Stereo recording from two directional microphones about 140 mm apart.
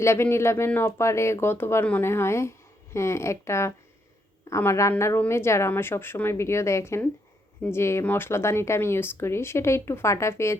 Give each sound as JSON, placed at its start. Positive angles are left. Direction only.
{"t": 0.0, "sound": "speech", "side_deg": 20}